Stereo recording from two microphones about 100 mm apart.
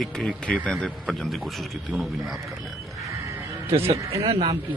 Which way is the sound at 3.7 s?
75° right (ahead or behind).